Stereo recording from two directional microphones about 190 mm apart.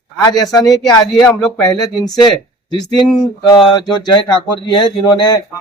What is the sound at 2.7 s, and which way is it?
Speech, 20° left (ahead or behind).